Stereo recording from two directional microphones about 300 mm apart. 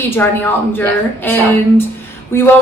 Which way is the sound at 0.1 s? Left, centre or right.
Centre.